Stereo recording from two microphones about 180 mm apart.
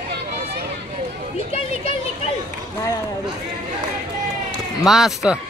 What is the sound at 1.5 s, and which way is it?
Speech, 35° left (ahead or behind).